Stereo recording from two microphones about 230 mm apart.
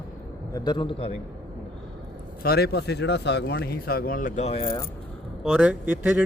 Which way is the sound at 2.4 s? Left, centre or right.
Left.